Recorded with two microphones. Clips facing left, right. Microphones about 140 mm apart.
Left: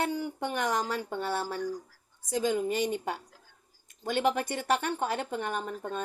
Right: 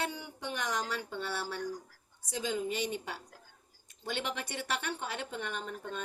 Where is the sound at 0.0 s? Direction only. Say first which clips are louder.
Left 7 dB; 45° left (ahead or behind).